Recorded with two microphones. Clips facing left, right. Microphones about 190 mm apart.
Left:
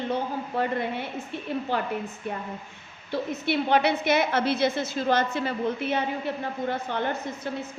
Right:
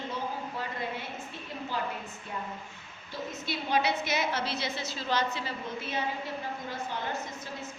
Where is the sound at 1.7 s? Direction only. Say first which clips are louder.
Left 6 dB; 65° left (ahead or behind).